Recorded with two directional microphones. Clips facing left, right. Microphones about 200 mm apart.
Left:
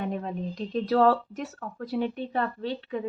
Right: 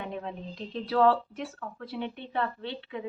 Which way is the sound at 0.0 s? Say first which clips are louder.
Left 5 dB; 40° left (ahead or behind).